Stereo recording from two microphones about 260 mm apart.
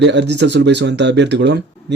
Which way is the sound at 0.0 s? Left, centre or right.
Right.